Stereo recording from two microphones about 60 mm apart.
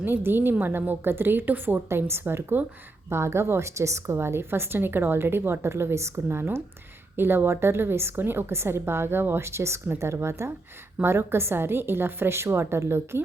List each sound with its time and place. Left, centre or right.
0.0 s a woman's voice: right
3.1 s a woman's voice: right